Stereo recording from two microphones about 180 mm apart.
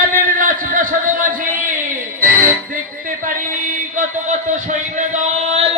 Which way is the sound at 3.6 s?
50° right (ahead or behind).